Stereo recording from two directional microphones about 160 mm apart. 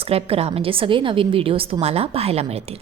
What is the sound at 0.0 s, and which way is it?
A woman's voice, 40° right (ahead or behind).